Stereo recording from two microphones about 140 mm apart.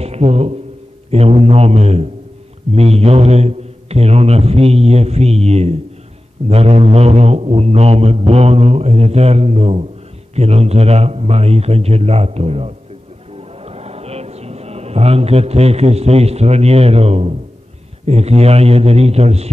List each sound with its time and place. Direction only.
0.0 s speech: 50° right (ahead or behind)
1.1 s mantra: 45° right (ahead or behind)
13.4 s a sound: 45° right (ahead or behind)
18.0 s mantra: 50° right (ahead or behind)